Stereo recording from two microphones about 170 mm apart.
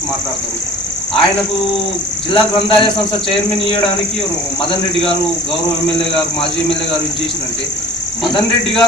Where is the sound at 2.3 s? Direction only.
30° left (ahead or behind).